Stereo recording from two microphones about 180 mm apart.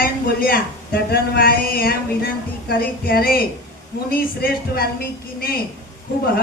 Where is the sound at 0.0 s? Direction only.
55° left (ahead or behind).